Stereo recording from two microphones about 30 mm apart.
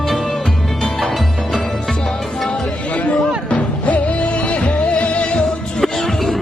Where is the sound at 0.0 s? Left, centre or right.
Centre.